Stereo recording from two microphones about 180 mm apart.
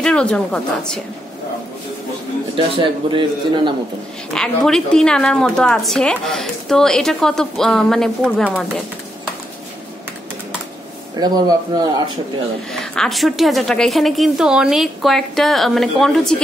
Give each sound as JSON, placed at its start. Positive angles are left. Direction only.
{"t": 0.0, "sound": "a woman's voice", "side_deg": 5}
{"t": 2.5, "sound": "a man's voice", "side_deg": -30}
{"t": 4.3, "sound": "a woman's voice", "side_deg": 5}
{"t": 11.1, "sound": "a man's voice", "side_deg": -20}
{"t": 12.9, "sound": "a woman's voice", "side_deg": 0}